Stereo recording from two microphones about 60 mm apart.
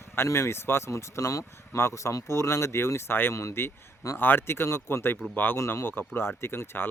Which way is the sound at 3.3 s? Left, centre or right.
Left.